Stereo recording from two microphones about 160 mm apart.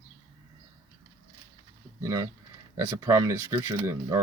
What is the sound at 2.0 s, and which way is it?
Speech, 20° right (ahead or behind).